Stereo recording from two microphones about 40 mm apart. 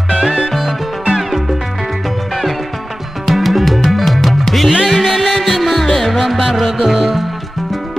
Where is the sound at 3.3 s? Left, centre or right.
Centre.